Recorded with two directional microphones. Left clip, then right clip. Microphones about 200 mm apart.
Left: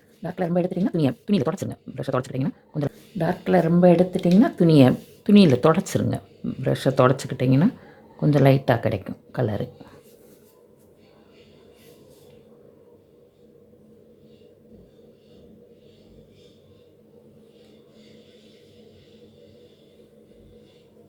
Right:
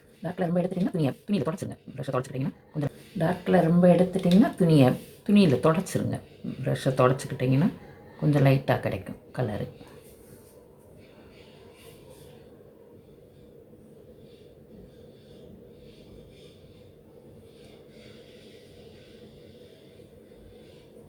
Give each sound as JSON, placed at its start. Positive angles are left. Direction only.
{"t": 0.2, "sound": "speech", "side_deg": 40}